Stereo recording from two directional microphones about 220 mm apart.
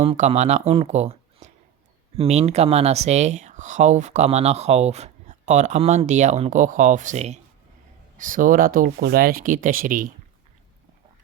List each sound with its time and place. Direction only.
0.0 s speech: 30° right (ahead or behind)